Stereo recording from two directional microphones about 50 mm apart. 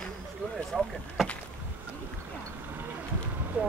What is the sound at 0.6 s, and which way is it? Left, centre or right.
Vehicle, centre.